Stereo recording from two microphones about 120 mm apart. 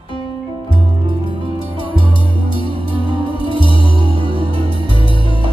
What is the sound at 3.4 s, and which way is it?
Music, 45° left (ahead or behind).